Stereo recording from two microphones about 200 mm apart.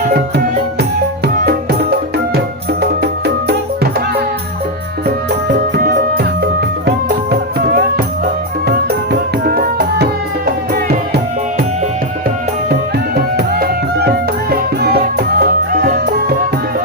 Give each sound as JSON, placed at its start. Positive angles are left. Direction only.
{"t": 0.1, "sound": "music", "side_deg": -55}
{"t": 5.7, "sound": "music", "side_deg": -50}
{"t": 9.4, "sound": "music", "side_deg": -50}
{"t": 13.3, "sound": "music", "side_deg": -55}